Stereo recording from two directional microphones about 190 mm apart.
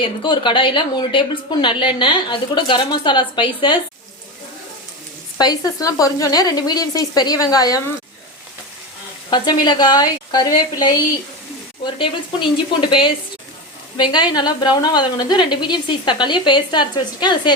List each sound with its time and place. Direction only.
0.0 s a woman's voice: 25° left (ahead or behind)
5.4 s a woman's voice: 20° left (ahead or behind)
9.3 s a woman's voice: 20° left (ahead or behind)